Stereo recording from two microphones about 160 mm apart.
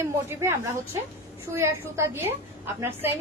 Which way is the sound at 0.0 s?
15° right (ahead or behind).